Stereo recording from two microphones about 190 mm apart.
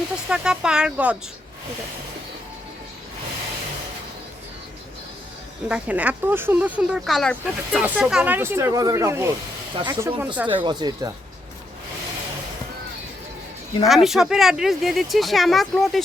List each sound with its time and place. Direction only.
0.3 s speech: 5° right (ahead or behind)
5.6 s speech: 5° right (ahead or behind); by 10.2 s 20° right (ahead or behind)
10.3 s speech: 10° right (ahead or behind)
10.6 s speech: 25° right (ahead or behind)
13.8 s speech: centre (ahead or behind)